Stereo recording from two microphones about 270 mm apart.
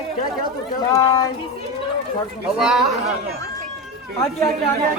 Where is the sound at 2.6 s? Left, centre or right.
Centre.